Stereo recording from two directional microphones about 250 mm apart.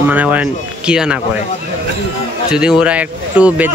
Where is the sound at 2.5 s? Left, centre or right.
Centre.